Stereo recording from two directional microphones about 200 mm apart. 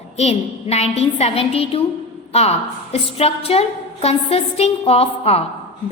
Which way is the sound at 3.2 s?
30° left (ahead or behind).